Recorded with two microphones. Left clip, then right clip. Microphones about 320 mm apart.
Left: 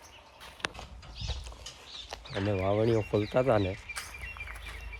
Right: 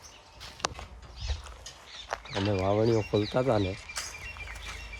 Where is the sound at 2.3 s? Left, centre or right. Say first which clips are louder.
Right 1 dB; centre.